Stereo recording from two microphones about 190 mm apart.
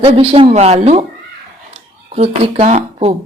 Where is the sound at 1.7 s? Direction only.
35° right (ahead or behind).